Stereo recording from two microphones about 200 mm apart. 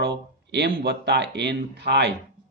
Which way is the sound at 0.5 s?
55° right (ahead or behind).